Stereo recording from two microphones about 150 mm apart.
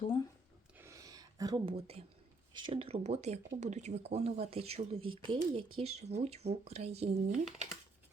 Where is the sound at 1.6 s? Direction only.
40° right (ahead or behind).